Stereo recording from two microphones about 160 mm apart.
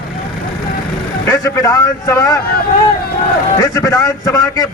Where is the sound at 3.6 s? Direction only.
20° left (ahead or behind).